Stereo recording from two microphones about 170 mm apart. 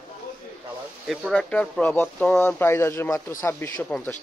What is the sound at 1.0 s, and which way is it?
Speech, centre (ahead or behind).